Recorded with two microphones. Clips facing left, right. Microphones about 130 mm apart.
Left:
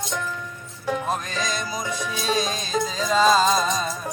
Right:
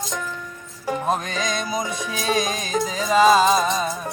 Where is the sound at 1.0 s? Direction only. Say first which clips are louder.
Right 3 dB; 20° right (ahead or behind).